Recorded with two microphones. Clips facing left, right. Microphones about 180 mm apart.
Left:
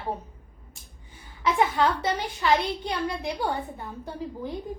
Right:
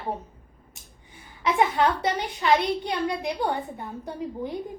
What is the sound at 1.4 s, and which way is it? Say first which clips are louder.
A woman's voice: right 1 dB; 25° right (ahead or behind).